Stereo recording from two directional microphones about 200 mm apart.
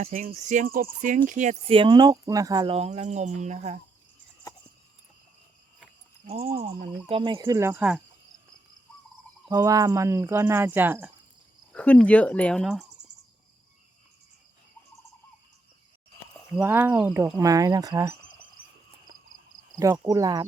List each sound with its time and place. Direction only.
0.0 s speech: 40° right (ahead or behind)
6.2 s speech: 30° right (ahead or behind)
7.1 s speech: 25° right (ahead or behind); by 8.0 s 5° right (ahead or behind)
9.5 s speech: 15° right (ahead or behind)
11.7 s speech: 5° left (ahead or behind)
13.1 s cricket: 35° right (ahead or behind)
16.6 s speech: 10° right (ahead or behind)
19.8 s speech: 15° right (ahead or behind)